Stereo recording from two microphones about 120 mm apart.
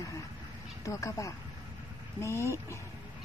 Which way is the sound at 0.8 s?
25° left (ahead or behind).